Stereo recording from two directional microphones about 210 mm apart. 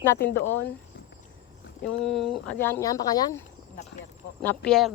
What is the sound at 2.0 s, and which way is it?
Speech, centre (ahead or behind).